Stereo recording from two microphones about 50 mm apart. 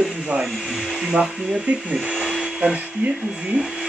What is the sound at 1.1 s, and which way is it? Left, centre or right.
Speech, centre.